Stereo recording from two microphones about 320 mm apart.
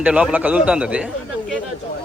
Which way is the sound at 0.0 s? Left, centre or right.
Centre.